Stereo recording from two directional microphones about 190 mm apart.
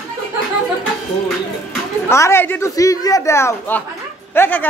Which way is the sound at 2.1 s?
15° left (ahead or behind).